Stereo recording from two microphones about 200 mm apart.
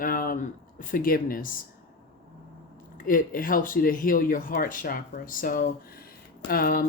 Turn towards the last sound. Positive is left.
turn(degrees=45)  # may be behind; listen again after turning